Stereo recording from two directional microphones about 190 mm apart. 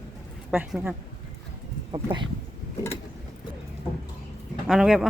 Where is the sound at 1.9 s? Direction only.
25° right (ahead or behind).